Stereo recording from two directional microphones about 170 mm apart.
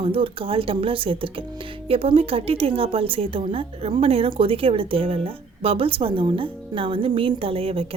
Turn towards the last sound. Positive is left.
turn(degrees=-35)  # may be behind; listen again after turning